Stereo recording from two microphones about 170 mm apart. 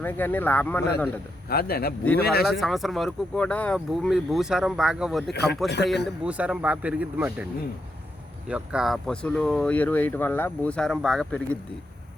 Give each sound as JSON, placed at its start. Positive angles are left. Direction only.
{"t": 0.0, "sound": "speech", "side_deg": 10}
{"t": 1.5, "sound": "speech", "side_deg": 65}
{"t": 2.5, "sound": "speech", "side_deg": 0}
{"t": 5.3, "sound": "a man's voice", "side_deg": 75}
{"t": 6.1, "sound": "speech", "side_deg": -5}
{"t": 8.4, "sound": "speech", "side_deg": -5}